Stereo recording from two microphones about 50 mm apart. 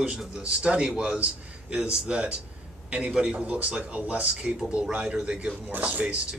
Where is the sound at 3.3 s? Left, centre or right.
Right.